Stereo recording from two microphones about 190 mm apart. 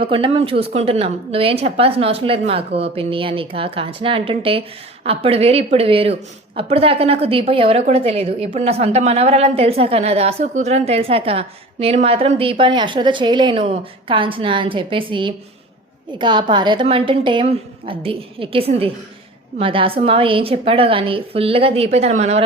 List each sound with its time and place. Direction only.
0.0 s a woman's voice: 25° right (ahead or behind)